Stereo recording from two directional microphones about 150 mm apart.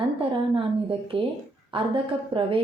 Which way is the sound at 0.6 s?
35° right (ahead or behind).